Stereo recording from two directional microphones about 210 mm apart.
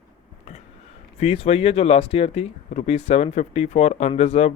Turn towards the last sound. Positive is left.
turn(degrees=30)  # may be behind; listen again after turning